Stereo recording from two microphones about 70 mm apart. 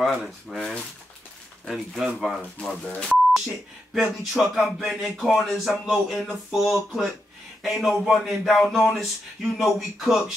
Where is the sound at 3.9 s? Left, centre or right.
Centre.